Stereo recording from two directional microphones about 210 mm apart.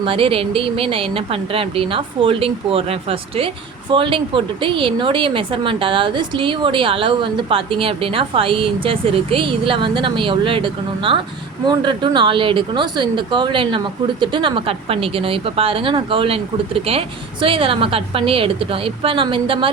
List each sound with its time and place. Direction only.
0.0 s speech: 25° right (ahead or behind)